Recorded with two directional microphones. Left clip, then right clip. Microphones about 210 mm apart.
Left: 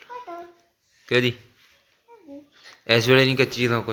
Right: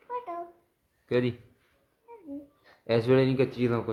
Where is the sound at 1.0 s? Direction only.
5° left (ahead or behind).